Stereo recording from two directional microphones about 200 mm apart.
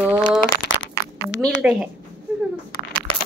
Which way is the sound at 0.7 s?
80° left.